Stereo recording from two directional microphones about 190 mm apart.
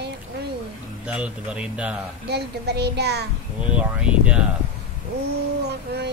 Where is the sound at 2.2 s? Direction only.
60° right (ahead or behind).